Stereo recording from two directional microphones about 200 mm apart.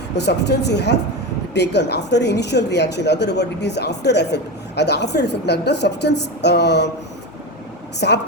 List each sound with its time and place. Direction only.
0.2 s a woman's voice: 55° left (ahead or behind)
8.0 s a woman's voice: 55° left (ahead or behind)